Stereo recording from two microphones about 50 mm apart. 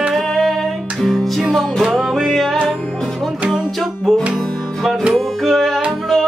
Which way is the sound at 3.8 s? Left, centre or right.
Centre.